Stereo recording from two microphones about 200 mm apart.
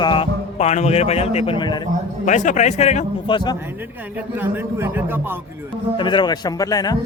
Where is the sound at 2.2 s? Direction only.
40° left (ahead or behind); by 3.6 s 20° left (ahead or behind).